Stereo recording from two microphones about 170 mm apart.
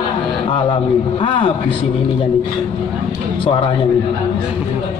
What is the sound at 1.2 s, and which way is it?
Speech, 30° left (ahead or behind).